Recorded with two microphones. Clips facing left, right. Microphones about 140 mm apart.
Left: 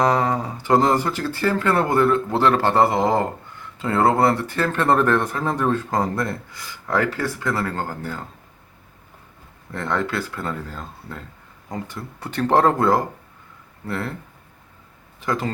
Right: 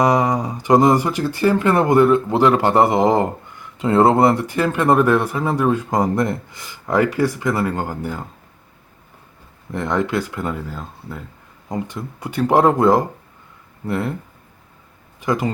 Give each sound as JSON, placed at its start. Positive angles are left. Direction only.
{"t": 0.0, "sound": "speech", "side_deg": -15}
{"t": 9.7, "sound": "speech", "side_deg": -15}
{"t": 15.2, "sound": "speech", "side_deg": -15}